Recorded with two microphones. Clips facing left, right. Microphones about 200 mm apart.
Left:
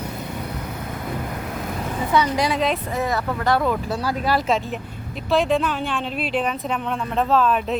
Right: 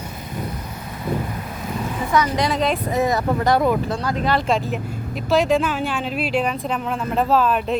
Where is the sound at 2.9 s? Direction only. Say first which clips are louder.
Right 4 dB; 15° right (ahead or behind).